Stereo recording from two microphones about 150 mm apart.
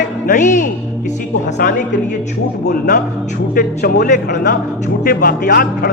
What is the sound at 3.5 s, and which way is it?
Speech, 90° left.